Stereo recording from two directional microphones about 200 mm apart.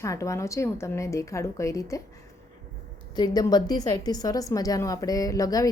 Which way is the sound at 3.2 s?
20° left (ahead or behind).